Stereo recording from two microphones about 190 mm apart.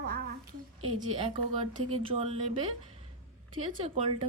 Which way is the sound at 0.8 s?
30° right (ahead or behind).